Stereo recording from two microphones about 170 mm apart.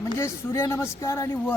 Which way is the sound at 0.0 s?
15° left (ahead or behind).